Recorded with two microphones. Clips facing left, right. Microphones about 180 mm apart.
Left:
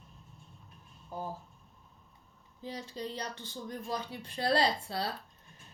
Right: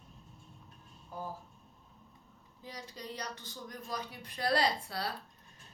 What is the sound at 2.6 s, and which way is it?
Speech, 30° left (ahead or behind).